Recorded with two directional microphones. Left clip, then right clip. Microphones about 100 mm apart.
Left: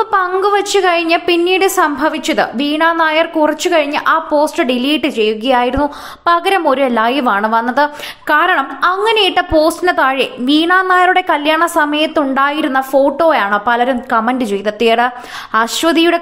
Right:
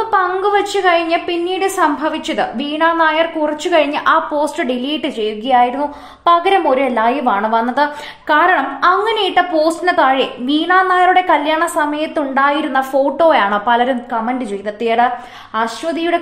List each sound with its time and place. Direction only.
0.0 s a sound: 40° left (ahead or behind)
0.4 s a woman's voice: 30° left (ahead or behind)
3.7 s a woman's voice: 15° left (ahead or behind); by 6.6 s 40° left (ahead or behind)
6.6 s a woman's voice: 50° left (ahead or behind)
7.3 s a woman's voice: 25° left (ahead or behind)
8.3 s a woman's voice: 35° left (ahead or behind)
9.6 s a woman's voice: 35° left (ahead or behind)
14.1 s a woman's voice: 50° left (ahead or behind)
15.5 s speech: 65° left (ahead or behind)